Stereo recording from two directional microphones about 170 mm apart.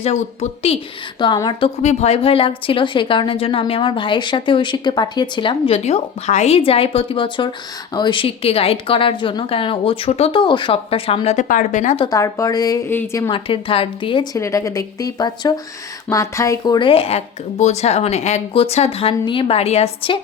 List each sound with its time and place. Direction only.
0.0 s a woman's voice: 40° left (ahead or behind)
1.2 s a woman's voice: 25° left (ahead or behind)
1.8 s a woman's voice: 40° left (ahead or behind)
11.4 s speech: 50° left (ahead or behind)
12.0 s a woman's voice: 20° left (ahead or behind)
13.3 s a woman's voice: 30° left (ahead or behind)
14.3 s a woman's voice: 20° left (ahead or behind); by 20.1 s 35° left (ahead or behind)